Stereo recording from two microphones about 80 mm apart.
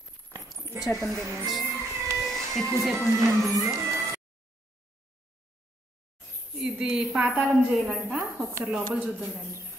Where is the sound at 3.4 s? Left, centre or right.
Centre.